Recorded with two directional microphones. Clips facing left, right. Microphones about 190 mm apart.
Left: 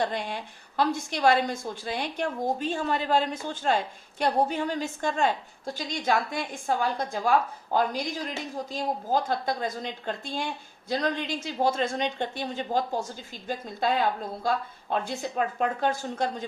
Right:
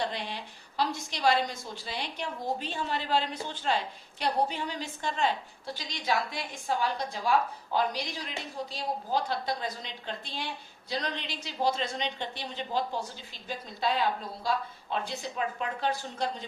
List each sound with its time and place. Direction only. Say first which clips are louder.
0.0 s a woman's voice: left 5 dB; 50° left (ahead or behind)